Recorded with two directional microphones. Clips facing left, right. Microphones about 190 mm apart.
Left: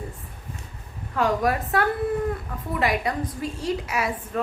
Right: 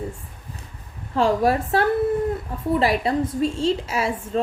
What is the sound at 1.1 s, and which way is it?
A woman's voice, 30° right (ahead or behind).